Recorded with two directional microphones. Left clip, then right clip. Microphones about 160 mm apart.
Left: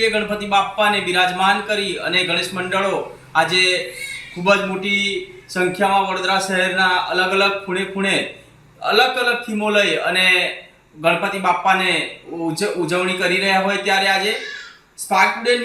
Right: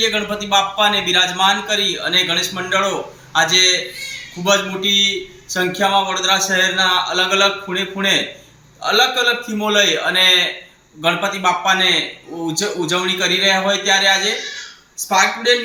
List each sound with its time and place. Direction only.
0.0 s a man's voice: 10° left (ahead or behind)
12.9 s a man's voice: 5° left (ahead or behind)